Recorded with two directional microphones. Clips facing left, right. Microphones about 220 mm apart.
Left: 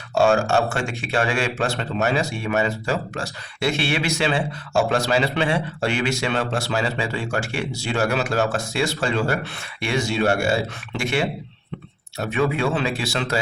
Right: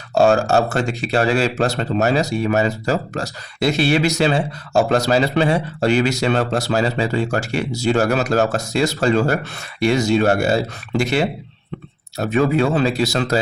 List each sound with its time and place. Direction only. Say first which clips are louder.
0.1 s speech: right 3 dB; 40° right (ahead or behind)